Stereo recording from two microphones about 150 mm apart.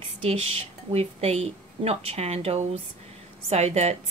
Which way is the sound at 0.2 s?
45° right (ahead or behind).